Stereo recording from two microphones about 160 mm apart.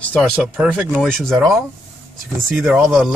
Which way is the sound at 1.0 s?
5° left (ahead or behind).